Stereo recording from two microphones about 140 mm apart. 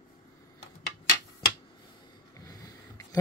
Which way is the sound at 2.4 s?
25° left (ahead or behind).